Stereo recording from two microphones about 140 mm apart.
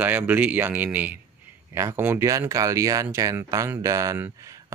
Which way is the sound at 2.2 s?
25° right (ahead or behind).